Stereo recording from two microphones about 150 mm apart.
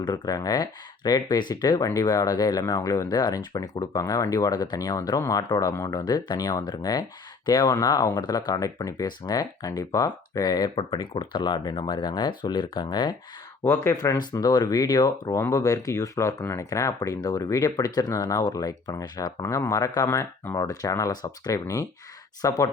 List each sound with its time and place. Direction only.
0.0 s speech: 25° left (ahead or behind)